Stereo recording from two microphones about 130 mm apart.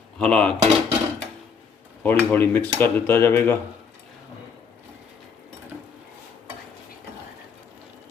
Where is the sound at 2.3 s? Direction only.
15° left (ahead or behind).